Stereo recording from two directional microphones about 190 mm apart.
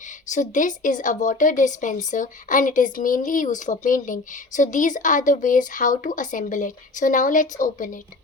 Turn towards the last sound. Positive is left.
turn(degrees=45)  # may be behind; listen again after turning